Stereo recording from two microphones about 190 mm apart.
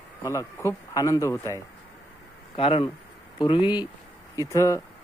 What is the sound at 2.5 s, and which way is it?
Speech, 30° left (ahead or behind).